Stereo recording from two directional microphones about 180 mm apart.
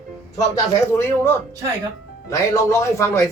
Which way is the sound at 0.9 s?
15° left (ahead or behind).